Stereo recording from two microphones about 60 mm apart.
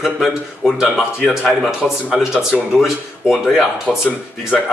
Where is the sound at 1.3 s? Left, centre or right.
Centre.